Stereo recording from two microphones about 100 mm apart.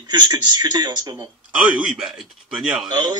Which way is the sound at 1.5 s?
15° right (ahead or behind).